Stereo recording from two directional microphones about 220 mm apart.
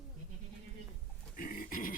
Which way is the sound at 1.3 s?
40° left (ahead or behind).